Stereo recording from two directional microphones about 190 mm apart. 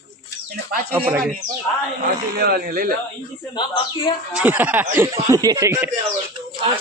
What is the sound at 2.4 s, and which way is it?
Speech, 55° right (ahead or behind).